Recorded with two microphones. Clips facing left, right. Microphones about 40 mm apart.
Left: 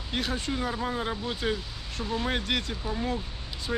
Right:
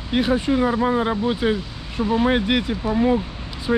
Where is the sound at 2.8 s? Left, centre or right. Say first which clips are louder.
Right 12 dB; right.